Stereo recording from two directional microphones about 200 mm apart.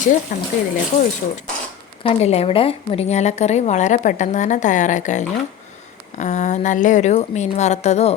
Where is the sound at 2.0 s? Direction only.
30° left (ahead or behind).